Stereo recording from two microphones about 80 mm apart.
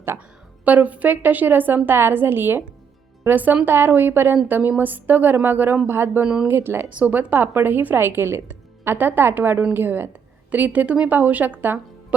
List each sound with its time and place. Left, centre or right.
0.6 s a woman's voice: centre
6.2 s speech: centre
6.5 s a woman's voice: right